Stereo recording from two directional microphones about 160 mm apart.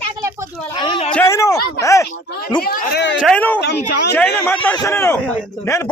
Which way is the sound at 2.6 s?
80° left.